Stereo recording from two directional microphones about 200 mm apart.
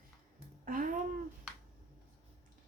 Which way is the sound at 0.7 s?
40° right (ahead or behind).